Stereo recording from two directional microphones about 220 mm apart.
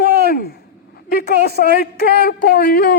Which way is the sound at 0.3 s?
45° left (ahead or behind).